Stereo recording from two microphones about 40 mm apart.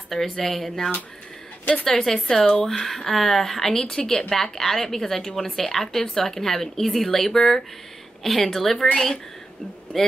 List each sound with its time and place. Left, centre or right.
0.1 s a woman's voice: centre
8.7 s a woman's voice: centre
9.9 s a woman's voice: centre